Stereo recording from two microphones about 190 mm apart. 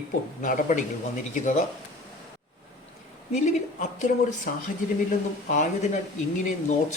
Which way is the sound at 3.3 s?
40° left (ahead or behind).